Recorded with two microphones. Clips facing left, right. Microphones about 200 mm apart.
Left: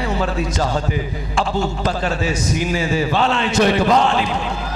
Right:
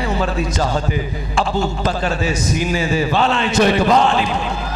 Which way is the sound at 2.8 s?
15° right (ahead or behind).